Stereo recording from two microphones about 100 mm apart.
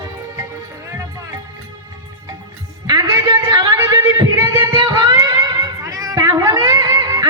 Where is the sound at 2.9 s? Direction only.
40° right (ahead or behind).